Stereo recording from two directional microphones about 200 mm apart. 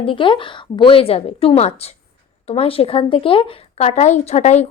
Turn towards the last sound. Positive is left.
turn(degrees=35)  # may be behind; listen again after turning